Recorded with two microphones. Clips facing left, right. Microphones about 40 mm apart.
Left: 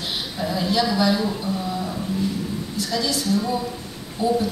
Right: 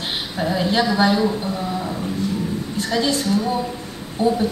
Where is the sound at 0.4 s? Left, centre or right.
Right.